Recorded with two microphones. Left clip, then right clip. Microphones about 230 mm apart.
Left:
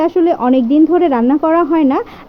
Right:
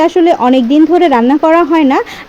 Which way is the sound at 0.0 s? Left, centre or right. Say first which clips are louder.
Right 4 dB; right.